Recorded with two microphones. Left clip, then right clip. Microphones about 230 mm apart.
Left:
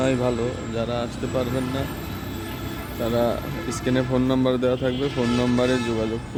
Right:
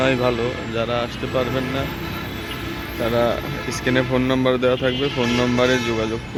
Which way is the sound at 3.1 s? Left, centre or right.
Centre.